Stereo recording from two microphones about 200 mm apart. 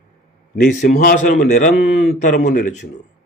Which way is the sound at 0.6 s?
40° left (ahead or behind).